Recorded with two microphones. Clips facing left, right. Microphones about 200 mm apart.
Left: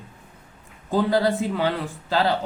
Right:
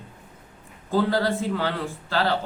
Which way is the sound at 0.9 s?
15° left (ahead or behind).